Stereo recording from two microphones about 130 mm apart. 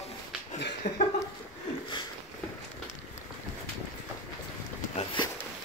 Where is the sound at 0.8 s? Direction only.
85° left.